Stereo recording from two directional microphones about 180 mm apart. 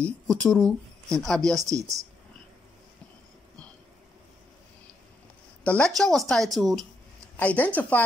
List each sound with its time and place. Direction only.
0.0 s speech: 5° left (ahead or behind)
1.6 s speech: 20° right (ahead or behind)
5.6 s a woman's voice: 5° left (ahead or behind)